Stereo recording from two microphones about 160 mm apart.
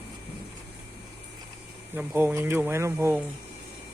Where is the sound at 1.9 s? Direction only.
15° right (ahead or behind).